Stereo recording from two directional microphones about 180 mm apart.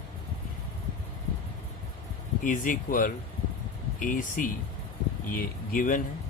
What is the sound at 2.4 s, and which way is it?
Speech, 50° left (ahead or behind).